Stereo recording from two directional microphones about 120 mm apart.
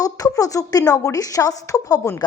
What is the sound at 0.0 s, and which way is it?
A woman's voice, 30° left (ahead or behind).